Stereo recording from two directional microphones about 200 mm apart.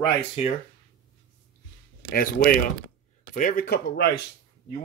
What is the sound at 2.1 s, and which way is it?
Speech, 45° left (ahead or behind).